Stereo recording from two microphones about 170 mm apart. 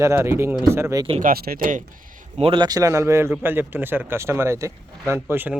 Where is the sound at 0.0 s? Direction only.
15° right (ahead or behind).